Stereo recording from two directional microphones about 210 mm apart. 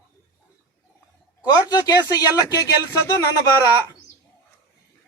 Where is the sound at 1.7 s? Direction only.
20° left (ahead or behind).